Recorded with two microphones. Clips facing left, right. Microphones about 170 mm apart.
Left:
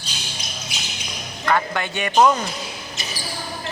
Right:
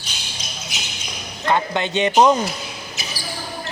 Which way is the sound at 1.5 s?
20° right (ahead or behind).